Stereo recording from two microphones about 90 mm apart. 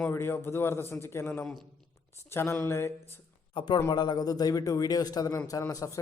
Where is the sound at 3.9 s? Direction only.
50° left (ahead or behind).